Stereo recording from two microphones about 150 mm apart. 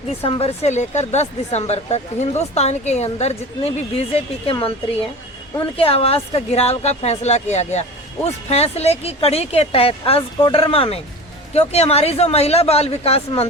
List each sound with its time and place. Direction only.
0.2 s speech: 40° left (ahead or behind)
5.5 s speech: 40° left (ahead or behind)